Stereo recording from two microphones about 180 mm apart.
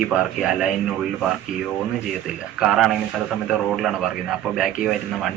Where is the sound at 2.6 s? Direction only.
Centre (ahead or behind).